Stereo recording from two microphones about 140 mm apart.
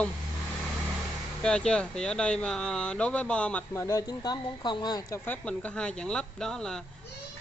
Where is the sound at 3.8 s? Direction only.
25° left (ahead or behind).